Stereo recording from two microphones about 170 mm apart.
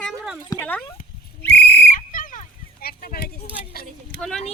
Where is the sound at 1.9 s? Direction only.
50° left (ahead or behind).